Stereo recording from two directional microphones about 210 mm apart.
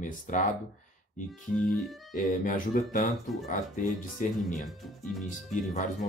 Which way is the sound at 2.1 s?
40° left (ahead or behind).